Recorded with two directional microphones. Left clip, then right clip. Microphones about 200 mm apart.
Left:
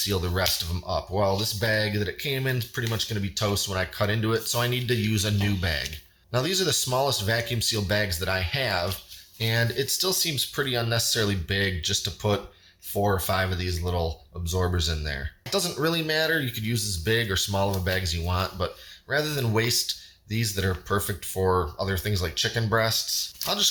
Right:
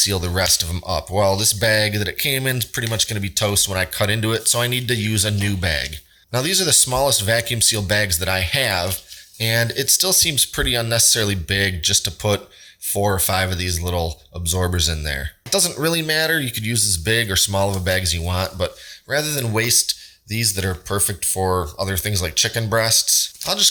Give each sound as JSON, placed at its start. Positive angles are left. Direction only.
{"t": 0.0, "sound": "speech", "side_deg": -35}